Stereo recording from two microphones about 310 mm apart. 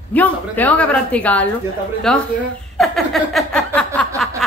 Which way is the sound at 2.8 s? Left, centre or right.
Centre.